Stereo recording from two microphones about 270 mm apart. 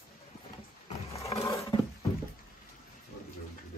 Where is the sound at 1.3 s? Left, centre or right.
Centre.